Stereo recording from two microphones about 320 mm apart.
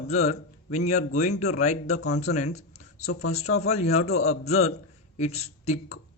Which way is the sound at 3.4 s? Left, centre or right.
Left.